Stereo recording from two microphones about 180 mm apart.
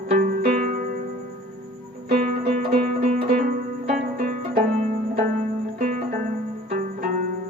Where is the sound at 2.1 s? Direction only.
45° right (ahead or behind).